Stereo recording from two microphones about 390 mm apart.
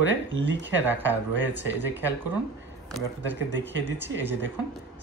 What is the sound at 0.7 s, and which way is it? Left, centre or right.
Speech, centre.